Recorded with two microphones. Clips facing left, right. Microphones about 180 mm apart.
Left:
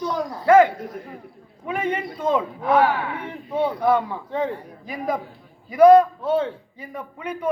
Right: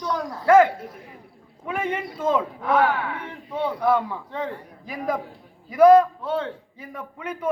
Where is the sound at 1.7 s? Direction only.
5° right (ahead or behind).